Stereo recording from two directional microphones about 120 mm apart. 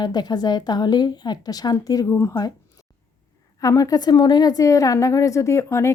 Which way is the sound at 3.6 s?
30° left (ahead or behind).